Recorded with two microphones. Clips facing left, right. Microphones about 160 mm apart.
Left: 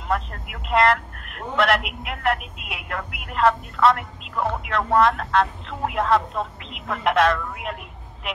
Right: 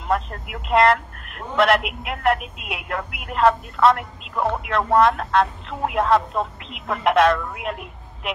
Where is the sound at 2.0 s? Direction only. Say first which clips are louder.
Right 3 dB; 40° right (ahead or behind).